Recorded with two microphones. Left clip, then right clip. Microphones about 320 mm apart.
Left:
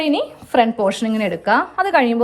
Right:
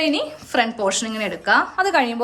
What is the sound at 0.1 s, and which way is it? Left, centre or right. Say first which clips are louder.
Speech: left 4 dB; centre.